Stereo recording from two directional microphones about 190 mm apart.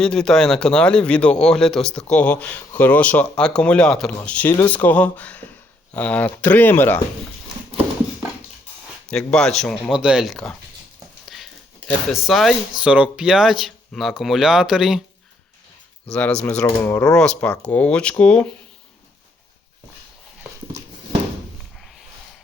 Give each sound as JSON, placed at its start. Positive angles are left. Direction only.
{"t": 0.0, "sound": "a man's voice", "side_deg": 5}
{"t": 9.0, "sound": "a man's voice", "side_deg": 5}
{"t": 12.2, "sound": "a man's voice", "side_deg": 0}
{"t": 16.0, "sound": "speech", "side_deg": 5}